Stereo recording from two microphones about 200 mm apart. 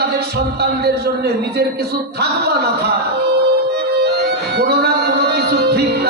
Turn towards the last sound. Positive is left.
turn(degrees=-55)  # may be behind; listen again after turning